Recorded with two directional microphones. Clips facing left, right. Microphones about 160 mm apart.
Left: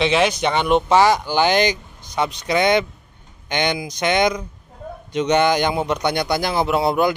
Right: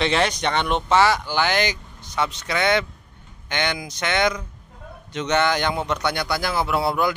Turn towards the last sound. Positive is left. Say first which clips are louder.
# left 4 dB
turn(degrees=20)  # may be behind; listen again after turning